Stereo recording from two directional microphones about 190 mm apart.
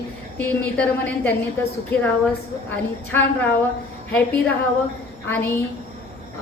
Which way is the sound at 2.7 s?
10° left (ahead or behind).